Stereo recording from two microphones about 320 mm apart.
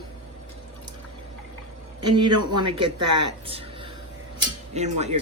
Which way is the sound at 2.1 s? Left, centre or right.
Centre.